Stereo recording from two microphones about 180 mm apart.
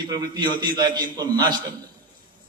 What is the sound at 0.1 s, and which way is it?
A man's voice, 25° right (ahead or behind).